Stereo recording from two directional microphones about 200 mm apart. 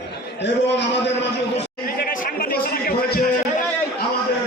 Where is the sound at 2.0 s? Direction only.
45° left (ahead or behind).